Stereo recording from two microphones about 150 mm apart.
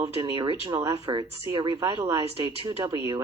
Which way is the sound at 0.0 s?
30° right (ahead or behind).